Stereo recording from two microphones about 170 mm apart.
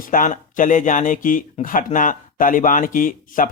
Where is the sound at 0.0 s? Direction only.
55° left (ahead or behind).